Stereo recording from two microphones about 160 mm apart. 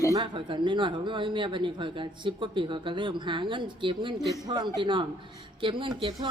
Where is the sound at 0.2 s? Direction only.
30° right (ahead or behind).